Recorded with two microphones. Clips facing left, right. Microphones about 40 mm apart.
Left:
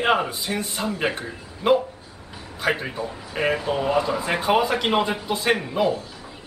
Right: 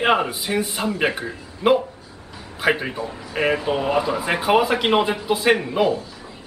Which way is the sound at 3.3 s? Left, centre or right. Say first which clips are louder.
Right 2 dB; centre.